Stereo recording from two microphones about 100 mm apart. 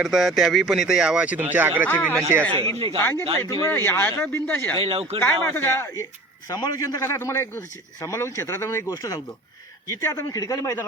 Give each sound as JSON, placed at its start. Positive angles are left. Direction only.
{"t": 0.0, "sound": "speech", "side_deg": -5}
{"t": 1.9, "sound": "speech", "side_deg": 15}
{"t": 2.7, "sound": "speech", "side_deg": -70}
{"t": 3.0, "sound": "a man's voice", "side_deg": 20}
{"t": 3.4, "sound": "a man's voice", "side_deg": 35}
{"t": 3.7, "sound": "a man's voice", "side_deg": 25}
{"t": 4.8, "sound": "speech", "side_deg": -75}
{"t": 5.2, "sound": "a man's voice", "side_deg": 20}
{"t": 6.5, "sound": "a man's voice", "side_deg": 40}
{"t": 9.0, "sound": "a man's voice", "side_deg": 40}